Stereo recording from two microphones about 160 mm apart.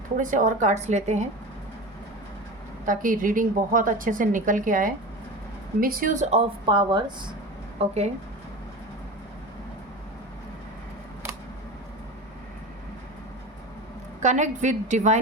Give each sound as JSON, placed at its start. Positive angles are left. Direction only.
{"t": 0.2, "sound": "a woman's voice", "side_deg": -55}
{"t": 2.8, "sound": "a woman's voice", "side_deg": -55}
{"t": 6.7, "sound": "speech", "side_deg": -30}
{"t": 7.8, "sound": "speech", "side_deg": -40}
{"t": 14.2, "sound": "a woman's voice", "side_deg": -50}